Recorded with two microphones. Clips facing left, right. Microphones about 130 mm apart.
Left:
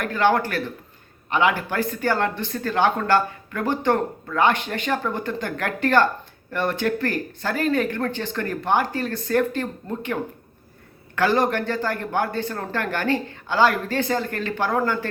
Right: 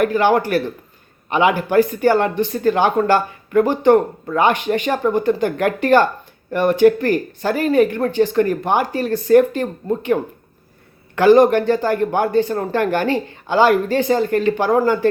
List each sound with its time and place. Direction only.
0.0 s speech: 15° right (ahead or behind)